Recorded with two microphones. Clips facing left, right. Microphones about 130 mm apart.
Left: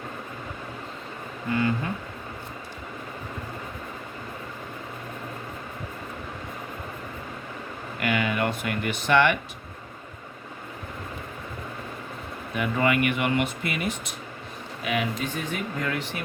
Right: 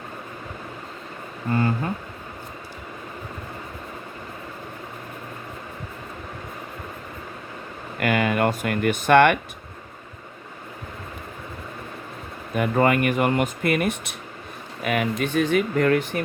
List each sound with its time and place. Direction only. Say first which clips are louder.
1.5 s speech: right 2 dB; 40° right (ahead or behind)
7.9 s speech: right 4 dB; 45° right (ahead or behind)
12.5 s speech: right 4 dB; 45° right (ahead or behind)
15.4 s speech: right 10 dB; 85° right
15.9 s speech: right 9 dB; 50° right (ahead or behind)